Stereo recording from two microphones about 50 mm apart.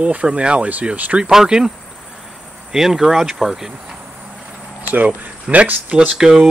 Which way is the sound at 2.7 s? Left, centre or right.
Centre.